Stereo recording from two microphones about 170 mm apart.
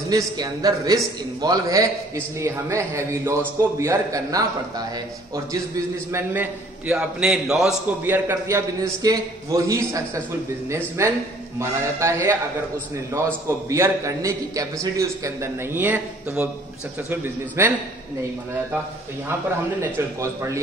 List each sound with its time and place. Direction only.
0.1 s a man's voice: 20° right (ahead or behind)
6.1 s a man's voice: 10° right (ahead or behind)
8.0 s a man's voice: 10° right (ahead or behind)
19.8 s a man's voice: 15° right (ahead or behind)